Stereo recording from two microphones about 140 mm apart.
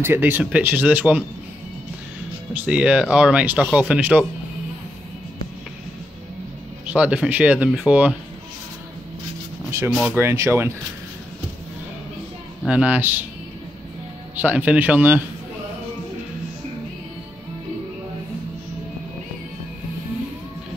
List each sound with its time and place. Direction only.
0.0 s speech: 15° right (ahead or behind)
2.5 s speech: 10° right (ahead or behind)
6.9 s speech: 5° right (ahead or behind)
9.8 s speech: 10° right (ahead or behind)
12.6 s speech: 10° right (ahead or behind)
14.3 s speech: 10° right (ahead or behind)